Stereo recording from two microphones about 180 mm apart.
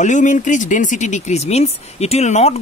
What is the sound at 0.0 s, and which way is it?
Speech, 45° left (ahead or behind).